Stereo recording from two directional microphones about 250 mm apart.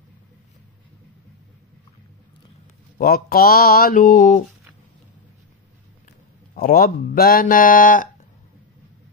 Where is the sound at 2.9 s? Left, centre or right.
Left.